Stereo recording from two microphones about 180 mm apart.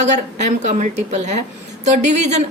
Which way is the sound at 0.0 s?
40° right (ahead or behind).